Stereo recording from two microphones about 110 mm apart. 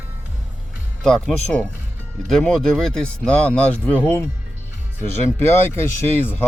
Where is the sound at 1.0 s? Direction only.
5° left (ahead or behind).